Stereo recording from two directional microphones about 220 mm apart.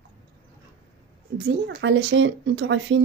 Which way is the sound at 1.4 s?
50° right (ahead or behind).